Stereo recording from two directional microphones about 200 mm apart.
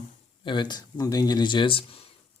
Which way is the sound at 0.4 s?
20° left (ahead or behind).